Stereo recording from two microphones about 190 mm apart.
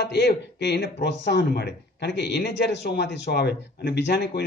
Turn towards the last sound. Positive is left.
turn(degrees=60)  # may be behind; listen again after turning